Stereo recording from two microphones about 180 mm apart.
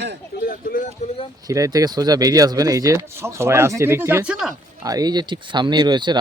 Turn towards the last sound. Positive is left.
turn(degrees=-25)  # may be behind; listen again after turning